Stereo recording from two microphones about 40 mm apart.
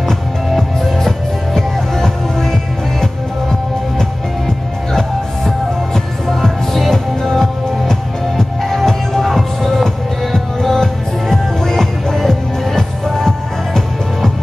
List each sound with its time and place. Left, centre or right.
0.5 s music: centre
6.2 s music: centre